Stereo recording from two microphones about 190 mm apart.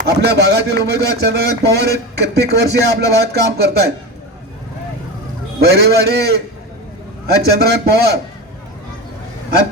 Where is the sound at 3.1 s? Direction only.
60° right (ahead or behind).